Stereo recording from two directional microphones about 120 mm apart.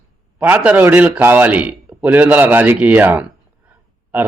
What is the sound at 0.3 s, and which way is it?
Speech, 10° right (ahead or behind).